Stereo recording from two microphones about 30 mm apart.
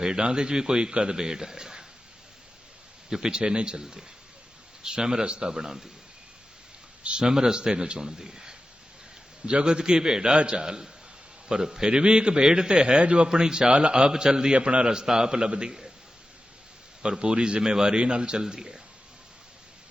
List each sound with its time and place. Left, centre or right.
0.0 s a man's voice: right
3.1 s a man's voice: right
7.0 s speech: right
7.3 s a man's voice: centre
10.3 s a man's voice: right
10.6 s a man's voice: right
13.2 s a man's voice: right
14.5 s a man's voice: right
15.0 s a man's voice: centre
17.0 s a man's voice: right
17.6 s a man's voice: right